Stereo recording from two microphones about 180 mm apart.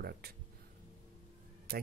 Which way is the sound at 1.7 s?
55° right (ahead or behind).